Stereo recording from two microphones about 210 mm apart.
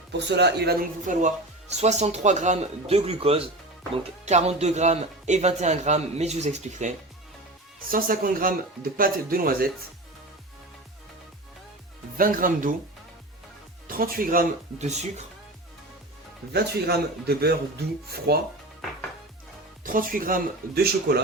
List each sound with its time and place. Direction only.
0.1 s a man's voice: 55° right (ahead or behind)
12.1 s a man's voice: 40° right (ahead or behind)
13.8 s a man's voice: 45° right (ahead or behind)
16.5 s speech: 50° right (ahead or behind)
19.8 s a man's voice: 40° right (ahead or behind)